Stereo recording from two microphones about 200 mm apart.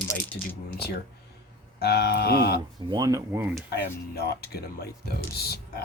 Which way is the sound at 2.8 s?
20° right (ahead or behind).